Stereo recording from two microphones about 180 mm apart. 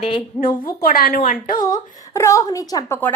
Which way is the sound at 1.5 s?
20° left (ahead or behind).